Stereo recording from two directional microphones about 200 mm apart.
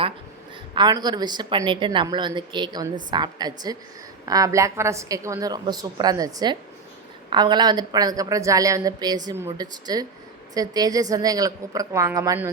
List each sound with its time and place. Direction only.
0.7 s a woman's voice: 20° right (ahead or behind)